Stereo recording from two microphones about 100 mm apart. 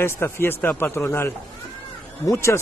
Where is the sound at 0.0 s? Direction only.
25° left (ahead or behind).